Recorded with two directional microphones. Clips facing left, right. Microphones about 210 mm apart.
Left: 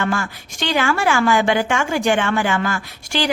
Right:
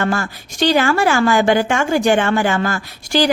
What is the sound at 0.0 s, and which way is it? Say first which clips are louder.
A woman's voice: right 2 dB; 40° right (ahead or behind).